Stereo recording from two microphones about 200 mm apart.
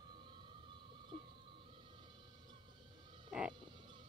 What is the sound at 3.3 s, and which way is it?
Frog, 5° right (ahead or behind).